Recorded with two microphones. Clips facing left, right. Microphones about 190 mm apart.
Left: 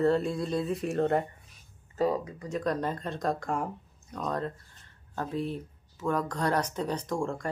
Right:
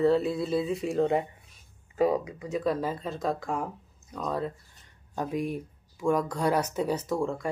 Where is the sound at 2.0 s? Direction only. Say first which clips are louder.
Right 3 dB; 15° right (ahead or behind).